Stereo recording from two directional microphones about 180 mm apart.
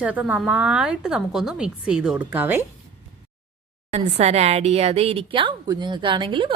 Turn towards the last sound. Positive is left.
turn(degrees=-25)  # may be behind; listen again after turning